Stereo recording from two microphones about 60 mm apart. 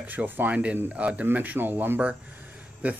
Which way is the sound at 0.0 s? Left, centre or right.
Right.